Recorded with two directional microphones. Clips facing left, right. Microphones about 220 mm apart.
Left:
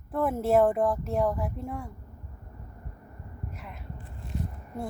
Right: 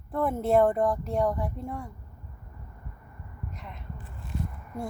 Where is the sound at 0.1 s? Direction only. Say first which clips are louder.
Even; 5° left (ahead or behind).